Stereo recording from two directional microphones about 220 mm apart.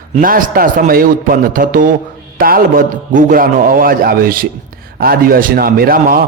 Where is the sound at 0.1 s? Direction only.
40° right (ahead or behind).